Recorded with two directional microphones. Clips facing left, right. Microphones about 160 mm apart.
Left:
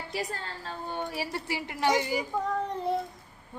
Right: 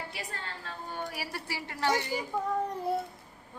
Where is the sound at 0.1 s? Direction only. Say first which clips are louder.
Left 6 dB; 35° left (ahead or behind); by 2.2 s 15° left (ahead or behind).